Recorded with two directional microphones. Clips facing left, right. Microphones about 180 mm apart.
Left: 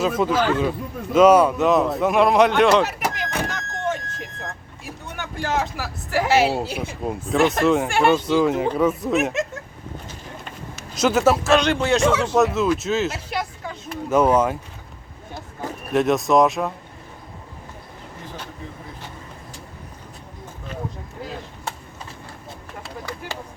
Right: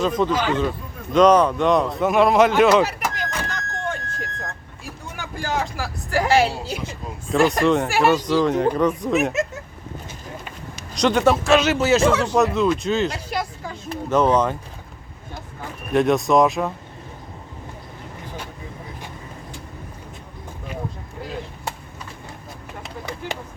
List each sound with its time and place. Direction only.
0.0 s speech: 5° left (ahead or behind)
5.0 s speech: centre (ahead or behind)
6.7 s speech: 55° left (ahead or behind)
7.3 s speech: centre (ahead or behind)
8.2 s speech: 5° left (ahead or behind)
10.9 s speech: 5° left (ahead or behind)
15.9 s speech: centre (ahead or behind)
22.8 s vehicle: 20° right (ahead or behind)